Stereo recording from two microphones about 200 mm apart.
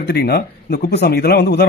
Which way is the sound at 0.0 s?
55° left (ahead or behind).